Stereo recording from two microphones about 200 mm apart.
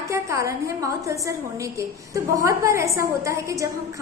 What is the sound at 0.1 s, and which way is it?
A woman's voice, 15° right (ahead or behind).